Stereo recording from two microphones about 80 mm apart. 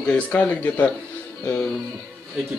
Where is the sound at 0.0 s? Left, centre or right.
Centre.